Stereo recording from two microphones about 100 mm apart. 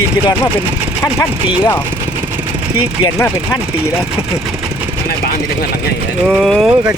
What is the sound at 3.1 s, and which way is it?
Speech, 25° left (ahead or behind).